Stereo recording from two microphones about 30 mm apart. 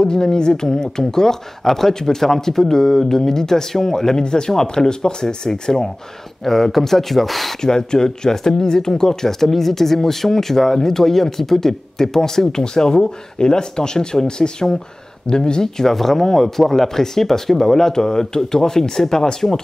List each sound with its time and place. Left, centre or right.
0.0 s speech: left; by 7.5 s centre
7.6 s speech: left
15.8 s speech: centre